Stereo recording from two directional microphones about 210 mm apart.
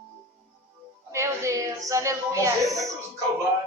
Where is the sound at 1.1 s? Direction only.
15° right (ahead or behind).